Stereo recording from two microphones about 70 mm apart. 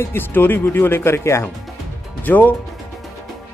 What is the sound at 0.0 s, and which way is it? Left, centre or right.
Speech, left.